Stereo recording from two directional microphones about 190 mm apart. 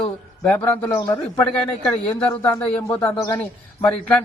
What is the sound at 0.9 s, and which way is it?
Speech, 20° left (ahead or behind).